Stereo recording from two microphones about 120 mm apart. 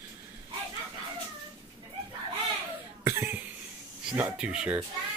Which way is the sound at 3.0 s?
20° right (ahead or behind).